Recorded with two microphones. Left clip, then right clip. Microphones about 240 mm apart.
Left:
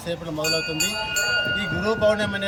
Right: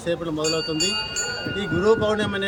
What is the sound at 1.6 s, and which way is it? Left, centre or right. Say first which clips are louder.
Speech: right 1 dB; centre.